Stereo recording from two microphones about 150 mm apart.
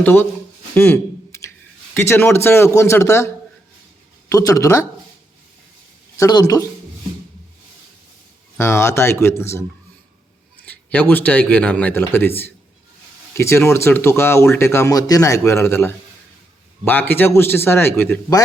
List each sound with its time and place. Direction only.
0.0 s speech: 15° left (ahead or behind)
0.7 s a sound: 15° left (ahead or behind)
1.9 s speech: 15° left (ahead or behind)
6.1 s speech: 25° left (ahead or behind)
8.5 s speech: 15° left (ahead or behind)
10.7 s speech: 10° left (ahead or behind)